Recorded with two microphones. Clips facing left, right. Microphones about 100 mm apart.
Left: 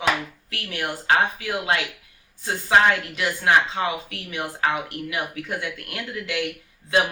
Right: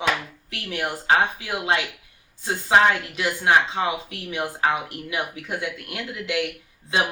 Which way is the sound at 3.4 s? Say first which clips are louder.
Even; 25° right (ahead or behind).